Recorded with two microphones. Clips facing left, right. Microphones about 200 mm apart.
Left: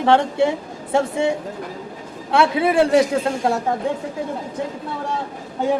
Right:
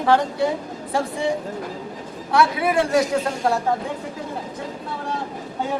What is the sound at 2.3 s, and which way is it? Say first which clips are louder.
Speech: left 2 dB; 25° left (ahead or behind).